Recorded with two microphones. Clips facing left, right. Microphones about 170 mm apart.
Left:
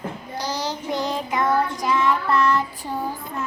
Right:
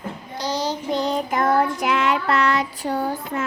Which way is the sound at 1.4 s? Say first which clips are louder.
Right 1 dB; 60° right (ahead or behind).